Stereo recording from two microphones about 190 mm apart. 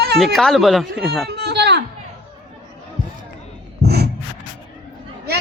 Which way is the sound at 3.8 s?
60° right (ahead or behind).